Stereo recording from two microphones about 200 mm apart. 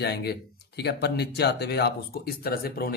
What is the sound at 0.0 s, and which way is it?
A man's voice, 55° left (ahead or behind).